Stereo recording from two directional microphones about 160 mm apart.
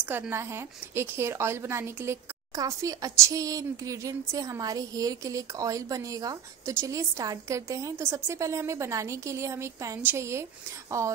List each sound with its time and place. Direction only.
0.0 s a woman's voice: 15° right (ahead or behind)